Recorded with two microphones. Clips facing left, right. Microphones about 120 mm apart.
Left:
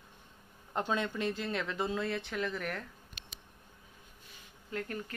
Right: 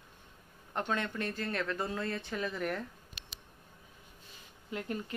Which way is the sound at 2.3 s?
10° right (ahead or behind).